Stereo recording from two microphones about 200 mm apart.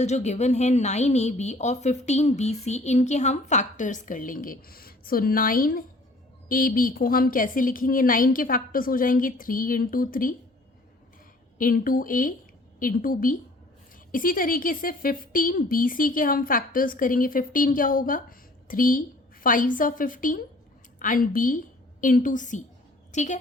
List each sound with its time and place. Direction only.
0.0 s a woman's voice: 35° left (ahead or behind)
11.5 s a woman's voice: 45° left (ahead or behind)